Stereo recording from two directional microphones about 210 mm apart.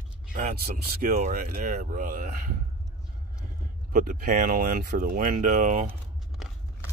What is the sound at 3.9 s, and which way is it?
Speech, 40° right (ahead or behind).